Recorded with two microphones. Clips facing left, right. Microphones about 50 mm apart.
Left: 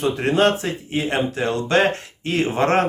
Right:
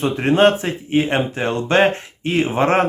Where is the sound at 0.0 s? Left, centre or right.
Right.